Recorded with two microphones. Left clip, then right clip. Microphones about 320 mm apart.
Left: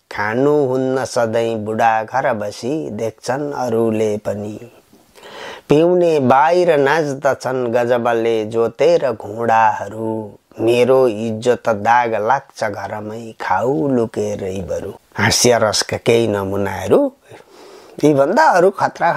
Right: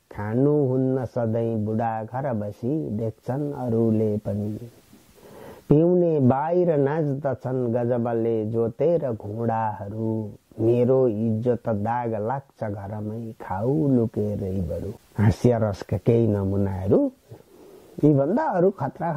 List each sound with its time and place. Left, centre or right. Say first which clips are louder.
0.1 s speech: left 8 dB; centre
5.4 s speech: left 7 dB; centre
10.6 s speech: left 8 dB; centre